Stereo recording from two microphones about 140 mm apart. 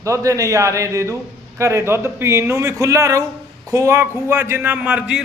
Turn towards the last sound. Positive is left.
turn(degrees=-10)  # may be behind; listen again after turning